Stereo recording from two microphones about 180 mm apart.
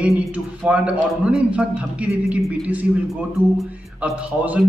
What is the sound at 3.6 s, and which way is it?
A man's voice, 5° right (ahead or behind).